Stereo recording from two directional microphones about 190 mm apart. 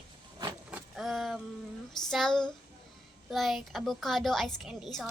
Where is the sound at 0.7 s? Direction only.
Centre (ahead or behind).